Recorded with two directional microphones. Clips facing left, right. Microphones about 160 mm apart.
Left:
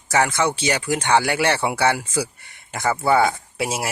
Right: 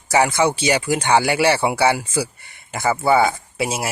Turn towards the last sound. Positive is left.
turn(degrees=0)  # may be behind; listen again after turning